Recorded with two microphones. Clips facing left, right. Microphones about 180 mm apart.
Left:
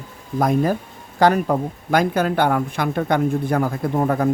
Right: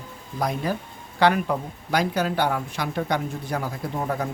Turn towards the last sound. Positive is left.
turn(degrees=55)  # may be behind; listen again after turning